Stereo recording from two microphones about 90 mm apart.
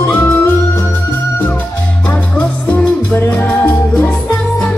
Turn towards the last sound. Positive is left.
turn(degrees=20)  # may be behind; listen again after turning